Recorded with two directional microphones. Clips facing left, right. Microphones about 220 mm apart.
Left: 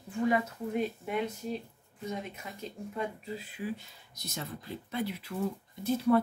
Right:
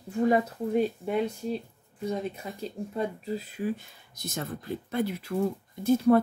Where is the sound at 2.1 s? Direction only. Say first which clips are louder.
Right 6 dB; 35° right (ahead or behind).